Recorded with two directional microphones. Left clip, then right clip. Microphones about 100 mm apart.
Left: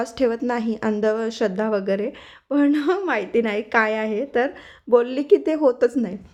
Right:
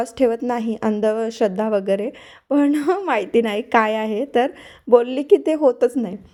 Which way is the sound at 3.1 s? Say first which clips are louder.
Right 3 dB; 50° right (ahead or behind).